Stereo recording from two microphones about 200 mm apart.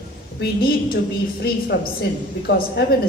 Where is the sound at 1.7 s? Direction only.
60° left (ahead or behind).